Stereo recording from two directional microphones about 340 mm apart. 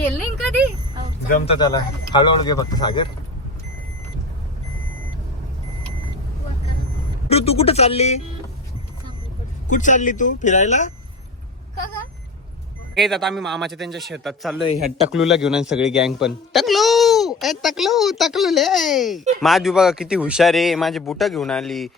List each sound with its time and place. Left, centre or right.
0.0 s a sound: centre
1.3 s speech: centre
7.3 s speech: centre
9.6 s speech: left
12.9 s speech: centre